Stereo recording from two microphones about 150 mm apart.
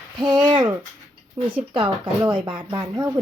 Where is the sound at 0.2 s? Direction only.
30° right (ahead or behind).